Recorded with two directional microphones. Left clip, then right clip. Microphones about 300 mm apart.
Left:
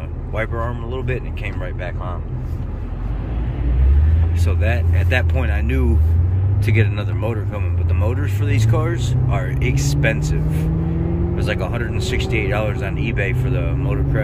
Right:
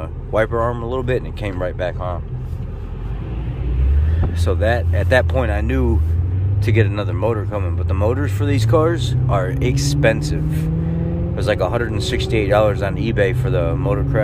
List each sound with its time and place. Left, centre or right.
0.3 s speech: centre
4.5 s speech: centre